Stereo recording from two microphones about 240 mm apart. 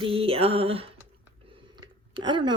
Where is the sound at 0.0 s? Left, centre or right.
Right.